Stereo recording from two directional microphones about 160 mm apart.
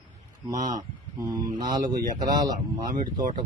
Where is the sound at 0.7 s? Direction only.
25° right (ahead or behind).